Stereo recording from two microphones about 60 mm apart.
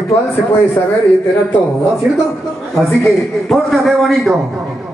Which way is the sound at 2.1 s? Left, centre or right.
Centre.